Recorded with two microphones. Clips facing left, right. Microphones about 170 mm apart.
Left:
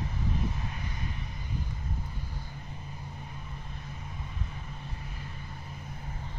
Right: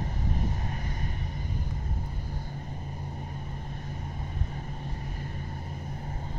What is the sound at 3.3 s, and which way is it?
Vehicle, 45° right (ahead or behind).